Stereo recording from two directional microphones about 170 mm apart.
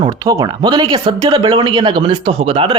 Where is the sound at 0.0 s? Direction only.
20° right (ahead or behind).